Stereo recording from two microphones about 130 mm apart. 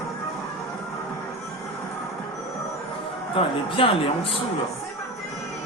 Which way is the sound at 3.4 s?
45° left (ahead or behind).